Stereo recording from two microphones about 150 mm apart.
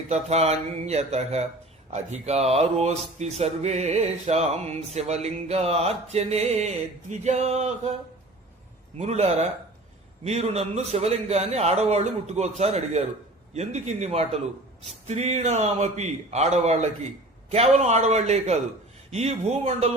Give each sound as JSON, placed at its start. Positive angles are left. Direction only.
{"t": 0.1, "sound": "speech", "side_deg": -45}
{"t": 9.0, "sound": "speech", "side_deg": -45}